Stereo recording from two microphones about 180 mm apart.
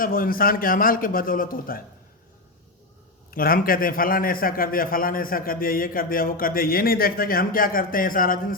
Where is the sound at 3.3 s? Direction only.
55° left (ahead or behind).